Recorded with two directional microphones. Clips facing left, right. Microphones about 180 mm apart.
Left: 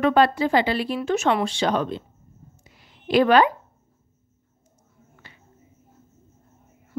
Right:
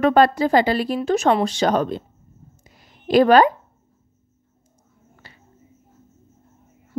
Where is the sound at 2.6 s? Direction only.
40° right (ahead or behind).